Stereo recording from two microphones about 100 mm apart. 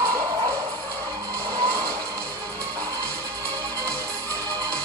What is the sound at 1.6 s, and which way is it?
Vehicle, 35° right (ahead or behind).